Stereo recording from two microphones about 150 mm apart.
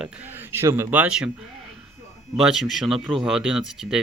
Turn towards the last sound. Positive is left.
turn(degrees=-5)  # may be behind; listen again after turning